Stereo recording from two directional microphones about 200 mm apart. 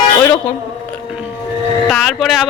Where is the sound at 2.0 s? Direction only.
Centre (ahead or behind).